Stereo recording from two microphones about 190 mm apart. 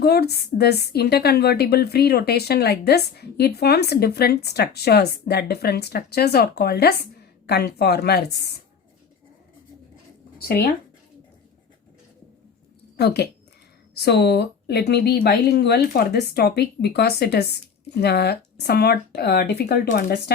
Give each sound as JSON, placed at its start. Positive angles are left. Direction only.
{"t": 0.0, "sound": "a woman's voice", "side_deg": 55}
{"t": 13.0, "sound": "a woman's voice", "side_deg": 60}